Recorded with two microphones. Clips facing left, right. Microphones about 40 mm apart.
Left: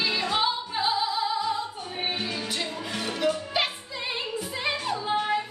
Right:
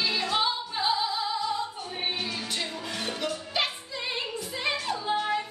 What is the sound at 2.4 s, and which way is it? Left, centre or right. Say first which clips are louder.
Music: left 2 dB; centre.